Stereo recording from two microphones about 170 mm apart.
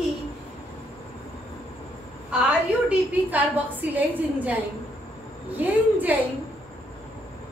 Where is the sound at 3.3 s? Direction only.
10° right (ahead or behind).